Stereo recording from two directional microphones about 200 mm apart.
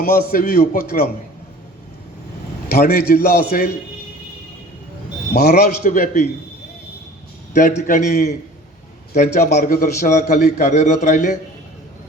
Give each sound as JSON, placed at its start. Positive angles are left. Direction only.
{"t": 0.0, "sound": "a man's voice", "side_deg": 50}
{"t": 2.6, "sound": "a man's voice", "side_deg": 50}
{"t": 5.3, "sound": "a man's voice", "side_deg": 50}
{"t": 7.5, "sound": "a man's voice", "side_deg": 35}